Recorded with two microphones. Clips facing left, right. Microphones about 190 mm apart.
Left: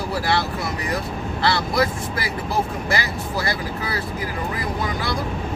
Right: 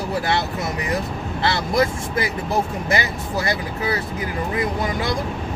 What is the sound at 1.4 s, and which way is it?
Speech, 20° right (ahead or behind).